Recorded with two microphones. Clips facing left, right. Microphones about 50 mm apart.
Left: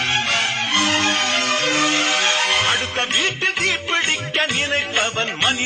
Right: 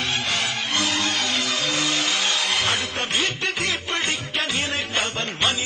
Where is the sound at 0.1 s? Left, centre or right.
Left.